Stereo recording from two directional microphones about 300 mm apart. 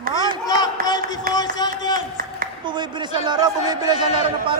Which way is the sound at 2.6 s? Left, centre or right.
Centre.